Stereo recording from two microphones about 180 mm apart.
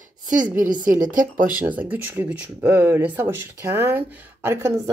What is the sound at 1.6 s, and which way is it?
Speech, 10° right (ahead or behind).